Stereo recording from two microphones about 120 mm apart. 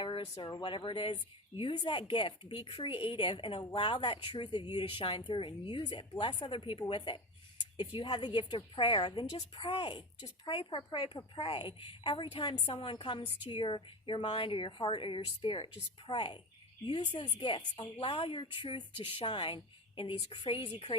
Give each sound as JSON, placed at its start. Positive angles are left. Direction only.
{"t": 0.4, "sound": "a woman's voice", "side_deg": 45}